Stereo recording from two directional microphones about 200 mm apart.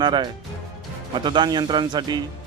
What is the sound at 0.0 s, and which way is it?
Speech, 20° right (ahead or behind).